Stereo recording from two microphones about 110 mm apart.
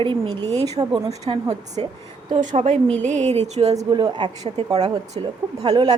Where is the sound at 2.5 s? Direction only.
60° right (ahead or behind).